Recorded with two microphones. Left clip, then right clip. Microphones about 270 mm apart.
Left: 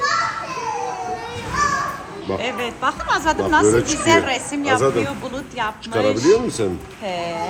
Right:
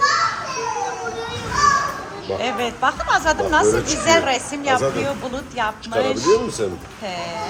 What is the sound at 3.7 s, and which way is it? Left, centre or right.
Speech, left.